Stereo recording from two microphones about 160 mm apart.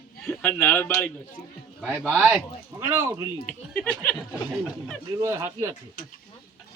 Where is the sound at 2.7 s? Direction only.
15° right (ahead or behind).